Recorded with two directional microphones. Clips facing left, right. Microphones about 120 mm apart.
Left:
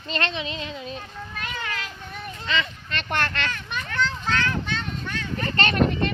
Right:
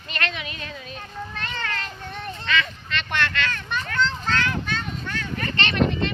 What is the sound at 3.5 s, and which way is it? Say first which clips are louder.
Children playing: right 2 dB; 10° left (ahead or behind).